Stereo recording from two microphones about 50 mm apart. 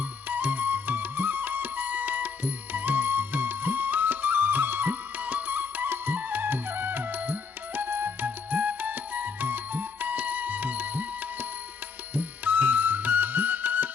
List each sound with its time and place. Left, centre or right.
0.3 s music: right